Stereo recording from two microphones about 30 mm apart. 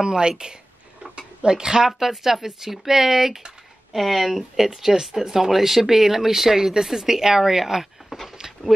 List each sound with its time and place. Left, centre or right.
0.0 s speech: right
1.1 s a sound: right
1.9 s speech: centre
3.9 s speech: centre
5.1 s speech: centre